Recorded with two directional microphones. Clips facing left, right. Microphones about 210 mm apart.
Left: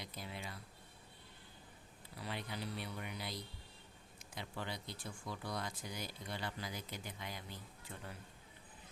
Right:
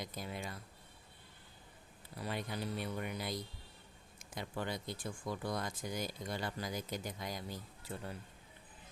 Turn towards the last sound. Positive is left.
turn(degrees=-40)  # may be behind; listen again after turning